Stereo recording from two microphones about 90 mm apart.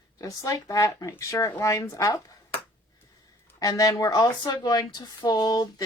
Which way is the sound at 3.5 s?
40° left (ahead or behind).